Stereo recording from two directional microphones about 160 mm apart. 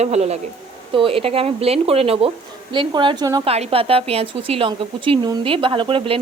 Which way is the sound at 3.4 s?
40° right (ahead or behind).